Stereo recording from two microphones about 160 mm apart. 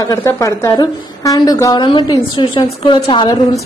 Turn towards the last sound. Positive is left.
turn(degrees=25)  # may be behind; listen again after turning